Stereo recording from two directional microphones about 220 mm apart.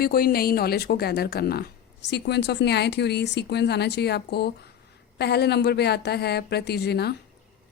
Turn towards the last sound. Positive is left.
turn(degrees=45)  # may be behind; listen again after turning